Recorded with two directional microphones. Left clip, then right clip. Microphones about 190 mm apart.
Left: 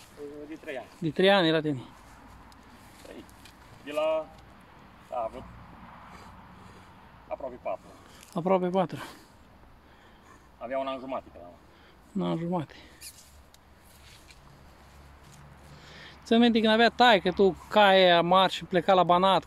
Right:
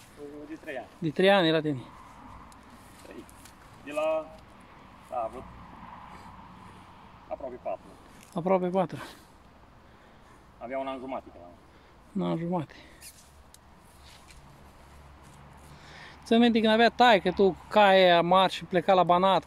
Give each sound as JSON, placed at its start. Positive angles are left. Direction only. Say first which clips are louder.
{"t": 0.2, "sound": "a sound", "louder": "left 2 dB", "side_deg": 15}
{"t": 0.7, "sound": "speech", "louder": "even", "side_deg": 15}
{"t": 1.0, "sound": "speech", "louder": "even", "side_deg": 0}
{"t": 3.8, "sound": "speech", "louder": "left 1 dB", "side_deg": 20}
{"t": 5.8, "sound": "vehicle", "louder": "right 4 dB", "side_deg": -60}
{"t": 7.2, "sound": "speech", "louder": "left 1 dB", "side_deg": 30}
{"t": 8.3, "sound": "speech", "louder": "even", "side_deg": 5}
{"t": 10.6, "sound": "speech", "louder": "left 2 dB", "side_deg": 35}
{"t": 12.2, "sound": "speech", "louder": "even", "side_deg": 0}
{"t": 15.7, "sound": "speech", "louder": "even", "side_deg": 0}